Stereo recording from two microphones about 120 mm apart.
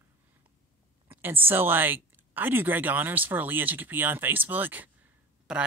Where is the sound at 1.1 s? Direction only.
15° right (ahead or behind).